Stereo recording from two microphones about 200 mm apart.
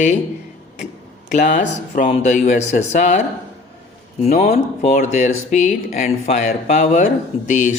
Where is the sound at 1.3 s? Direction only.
40° left (ahead or behind).